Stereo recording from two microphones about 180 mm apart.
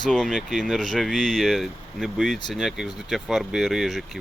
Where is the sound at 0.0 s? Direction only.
Centre (ahead or behind).